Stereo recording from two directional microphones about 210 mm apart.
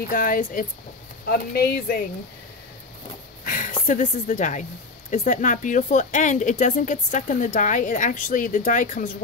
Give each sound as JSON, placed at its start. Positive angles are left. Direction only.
{"t": 0.1, "sound": "speech", "side_deg": 40}
{"t": 3.4, "sound": "speech", "side_deg": 40}